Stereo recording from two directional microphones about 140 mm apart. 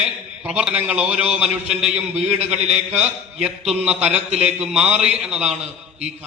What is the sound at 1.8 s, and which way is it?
Speech, 50° right (ahead or behind).